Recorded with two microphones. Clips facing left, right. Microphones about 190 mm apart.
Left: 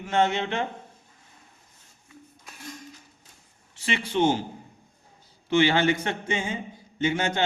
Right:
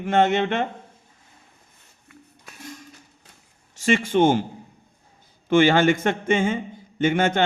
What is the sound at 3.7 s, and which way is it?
Speech, 45° right (ahead or behind).